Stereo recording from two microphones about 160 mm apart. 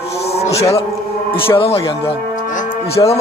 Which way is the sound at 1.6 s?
35° left (ahead or behind).